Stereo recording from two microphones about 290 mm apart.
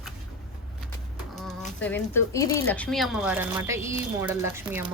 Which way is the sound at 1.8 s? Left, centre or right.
Centre.